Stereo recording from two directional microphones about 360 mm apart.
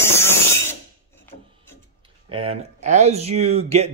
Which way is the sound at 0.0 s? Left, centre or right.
Centre.